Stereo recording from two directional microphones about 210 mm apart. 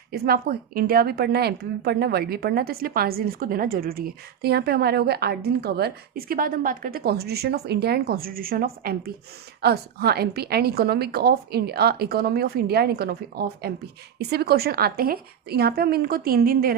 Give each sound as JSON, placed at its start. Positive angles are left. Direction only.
{"t": 0.1, "sound": "a woman's voice", "side_deg": -45}